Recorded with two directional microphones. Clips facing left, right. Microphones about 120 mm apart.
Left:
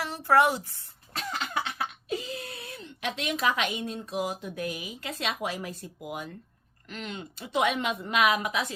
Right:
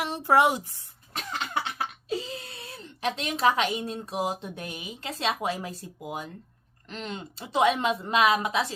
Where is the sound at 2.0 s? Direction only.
30° right (ahead or behind).